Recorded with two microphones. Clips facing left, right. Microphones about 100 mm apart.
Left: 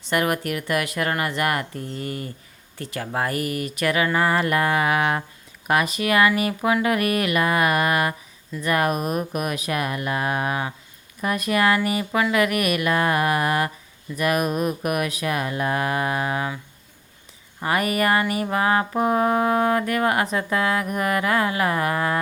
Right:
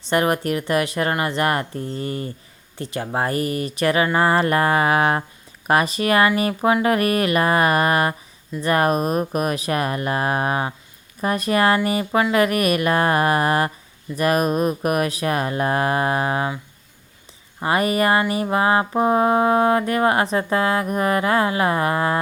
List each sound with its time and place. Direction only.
0.1 s music: 30° right (ahead or behind)
2.7 s speech: 20° right (ahead or behind)
17.6 s music: 25° right (ahead or behind)